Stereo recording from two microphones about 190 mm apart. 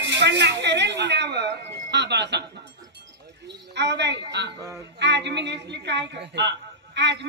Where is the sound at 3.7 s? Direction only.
65° right (ahead or behind).